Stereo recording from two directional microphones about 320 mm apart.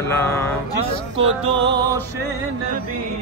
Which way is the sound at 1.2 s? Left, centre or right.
Centre.